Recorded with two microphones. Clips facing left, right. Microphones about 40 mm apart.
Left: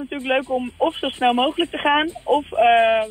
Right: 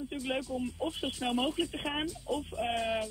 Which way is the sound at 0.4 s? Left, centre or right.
Left.